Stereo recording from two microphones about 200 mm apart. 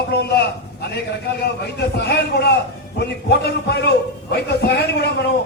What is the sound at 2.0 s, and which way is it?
A man's voice, 55° left (ahead or behind).